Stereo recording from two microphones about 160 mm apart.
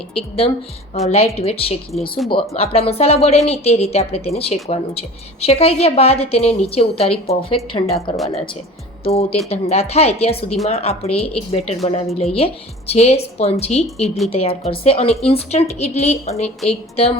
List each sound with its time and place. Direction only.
0.1 s speech: 35° left (ahead or behind)
1.9 s speech: centre (ahead or behind)
2.3 s speech: 40° left (ahead or behind)